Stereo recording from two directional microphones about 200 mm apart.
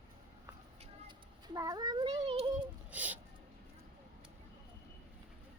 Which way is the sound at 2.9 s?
10° right (ahead or behind).